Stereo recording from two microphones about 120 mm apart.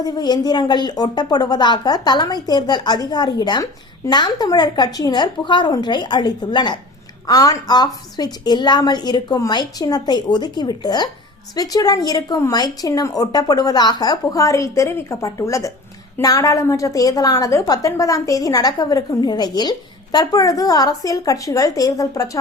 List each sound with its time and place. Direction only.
0.0 s a woman's voice: 35° left (ahead or behind)